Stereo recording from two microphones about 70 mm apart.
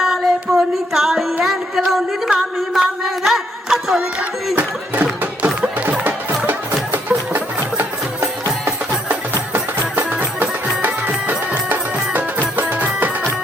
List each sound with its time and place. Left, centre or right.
0.0 s singing: centre
1.5 s a sound: centre
6.9 s music: right